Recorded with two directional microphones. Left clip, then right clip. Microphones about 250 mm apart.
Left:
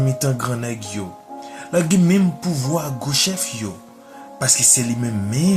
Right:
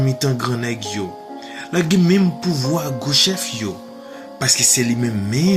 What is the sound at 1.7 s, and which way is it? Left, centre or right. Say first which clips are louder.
Speech: right 1 dB; centre.